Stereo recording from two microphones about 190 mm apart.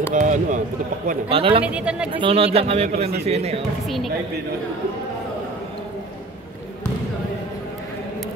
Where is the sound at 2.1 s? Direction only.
30° right (ahead or behind).